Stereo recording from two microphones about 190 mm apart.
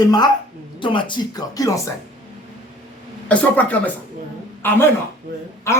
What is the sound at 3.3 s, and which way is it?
A woman's voice, 10° left (ahead or behind).